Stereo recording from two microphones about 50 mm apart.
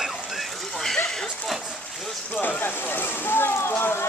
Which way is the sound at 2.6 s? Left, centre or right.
Left.